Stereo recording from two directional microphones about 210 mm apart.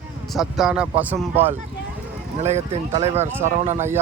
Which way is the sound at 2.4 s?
30° right (ahead or behind).